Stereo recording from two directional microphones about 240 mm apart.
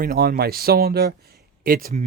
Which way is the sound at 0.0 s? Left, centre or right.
Right.